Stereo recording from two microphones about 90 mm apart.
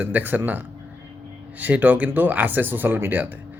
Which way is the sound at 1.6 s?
20° right (ahead or behind).